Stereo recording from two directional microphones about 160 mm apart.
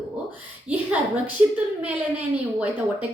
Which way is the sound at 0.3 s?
10° right (ahead or behind).